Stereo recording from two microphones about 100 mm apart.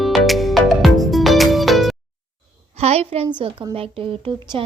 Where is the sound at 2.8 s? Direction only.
90° right.